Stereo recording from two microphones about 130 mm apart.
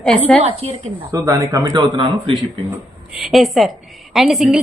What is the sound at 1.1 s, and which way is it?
Speech, 25° right (ahead or behind).